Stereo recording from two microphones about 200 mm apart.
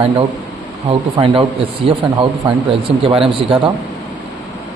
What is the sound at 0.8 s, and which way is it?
A man's voice, 25° right (ahead or behind).